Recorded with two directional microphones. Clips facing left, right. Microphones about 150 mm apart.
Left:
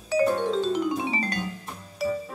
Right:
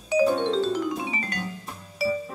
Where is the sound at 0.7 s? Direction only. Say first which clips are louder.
Left 1 dB; 20° left (ahead or behind).